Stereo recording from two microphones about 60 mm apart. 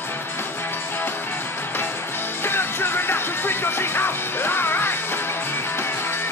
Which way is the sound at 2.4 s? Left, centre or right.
Left.